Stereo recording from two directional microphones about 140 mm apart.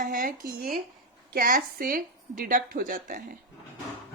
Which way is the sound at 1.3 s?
80° right.